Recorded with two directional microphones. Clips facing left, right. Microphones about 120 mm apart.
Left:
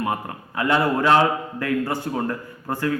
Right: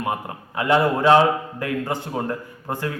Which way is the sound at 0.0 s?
20° right (ahead or behind).